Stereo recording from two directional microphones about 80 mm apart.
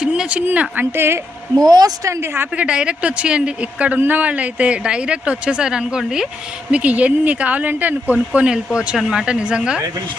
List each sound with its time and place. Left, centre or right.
0.0 s a sound: centre
0.4 s a woman's voice: right
1.6 s a woman's voice: right
2.0 s a woman's voice: right
2.6 s speech: centre